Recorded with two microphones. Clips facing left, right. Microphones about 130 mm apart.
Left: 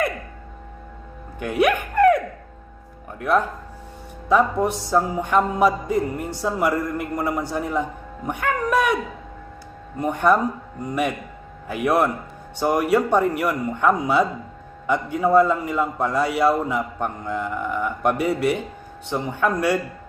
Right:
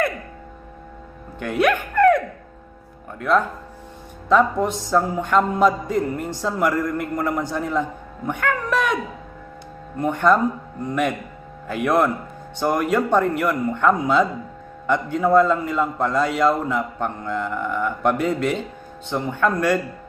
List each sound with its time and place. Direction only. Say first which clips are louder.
1.4 s a man's voice: even; 15° left (ahead or behind)
10.0 s a man's voice: right 1 dB; 15° left (ahead or behind)
11.7 s a man's voice: right 1 dB; 15° left (ahead or behind)